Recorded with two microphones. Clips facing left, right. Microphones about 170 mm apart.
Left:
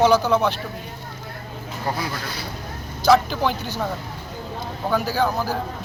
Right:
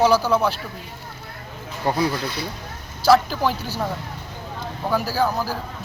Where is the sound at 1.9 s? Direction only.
25° right (ahead or behind).